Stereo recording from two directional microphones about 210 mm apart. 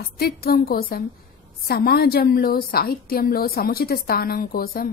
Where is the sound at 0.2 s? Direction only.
45° left (ahead or behind).